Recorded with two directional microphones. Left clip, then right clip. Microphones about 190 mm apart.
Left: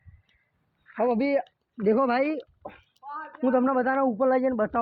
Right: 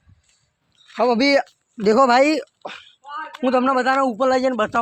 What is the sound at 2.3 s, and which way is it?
Speech, 55° right (ahead or behind).